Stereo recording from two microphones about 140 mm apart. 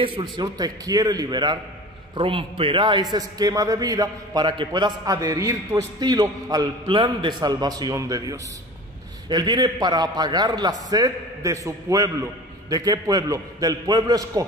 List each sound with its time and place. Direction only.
0.0 s a man's voice: 30° right (ahead or behind)